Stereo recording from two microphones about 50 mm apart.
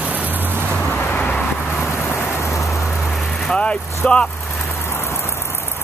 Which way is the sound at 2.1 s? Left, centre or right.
Left.